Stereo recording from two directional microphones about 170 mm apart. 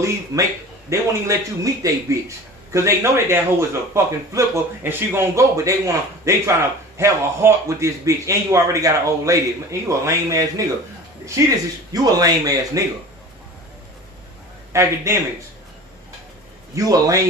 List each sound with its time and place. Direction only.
0.0 s speech: 20° right (ahead or behind)
14.7 s speech: 15° right (ahead or behind)
16.7 s speech: 20° right (ahead or behind)